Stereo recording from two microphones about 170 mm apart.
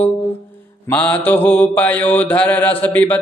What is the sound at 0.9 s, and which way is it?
Mantra, 10° left (ahead or behind).